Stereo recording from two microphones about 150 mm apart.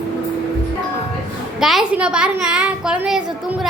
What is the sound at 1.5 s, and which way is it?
A woman's voice, centre (ahead or behind).